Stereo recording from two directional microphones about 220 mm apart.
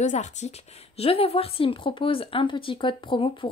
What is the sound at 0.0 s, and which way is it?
A woman's voice, 30° left (ahead or behind).